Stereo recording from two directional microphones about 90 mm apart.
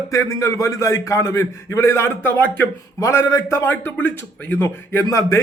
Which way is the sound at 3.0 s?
30° left (ahead or behind).